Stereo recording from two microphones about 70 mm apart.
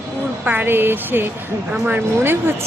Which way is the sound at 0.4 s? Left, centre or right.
Right.